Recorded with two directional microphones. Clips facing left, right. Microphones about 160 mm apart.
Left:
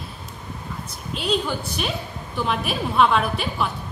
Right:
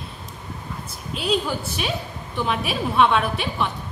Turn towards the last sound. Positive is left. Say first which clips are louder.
# even
turn(degrees=0)  # may be behind; listen again after turning